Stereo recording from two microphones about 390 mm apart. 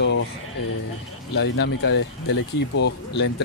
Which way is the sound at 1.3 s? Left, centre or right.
Left.